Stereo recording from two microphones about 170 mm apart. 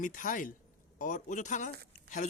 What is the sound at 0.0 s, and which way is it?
Speech, 50° left (ahead or behind).